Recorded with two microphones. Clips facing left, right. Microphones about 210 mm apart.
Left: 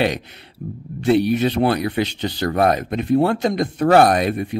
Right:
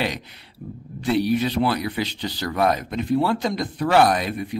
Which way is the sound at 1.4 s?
55° left (ahead or behind).